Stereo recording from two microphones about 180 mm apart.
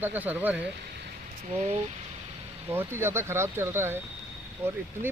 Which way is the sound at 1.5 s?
35° right (ahead or behind).